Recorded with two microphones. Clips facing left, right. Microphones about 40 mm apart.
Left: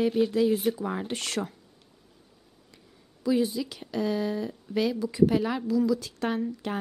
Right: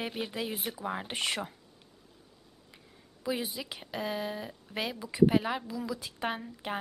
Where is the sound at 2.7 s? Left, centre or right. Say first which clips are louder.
Left 1 dB; right.